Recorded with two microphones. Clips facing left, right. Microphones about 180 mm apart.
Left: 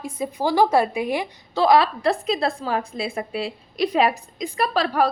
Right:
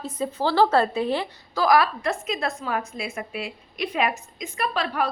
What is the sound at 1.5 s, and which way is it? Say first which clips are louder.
A woman's voice: left 3 dB; 25° left (ahead or behind).